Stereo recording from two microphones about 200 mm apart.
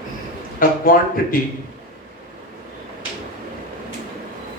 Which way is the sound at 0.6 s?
45° left (ahead or behind).